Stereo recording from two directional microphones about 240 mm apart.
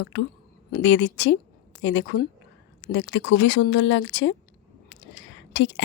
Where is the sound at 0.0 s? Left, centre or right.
Left.